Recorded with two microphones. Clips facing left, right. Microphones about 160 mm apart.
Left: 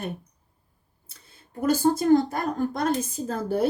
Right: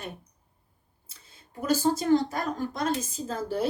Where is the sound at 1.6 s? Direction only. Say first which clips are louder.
Left 4 dB; 55° left (ahead or behind).